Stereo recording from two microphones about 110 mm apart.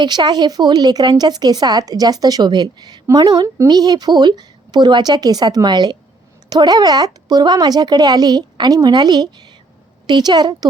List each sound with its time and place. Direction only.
0.0 s speech: 40° right (ahead or behind)